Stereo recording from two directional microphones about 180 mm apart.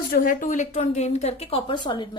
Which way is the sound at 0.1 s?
50° left (ahead or behind).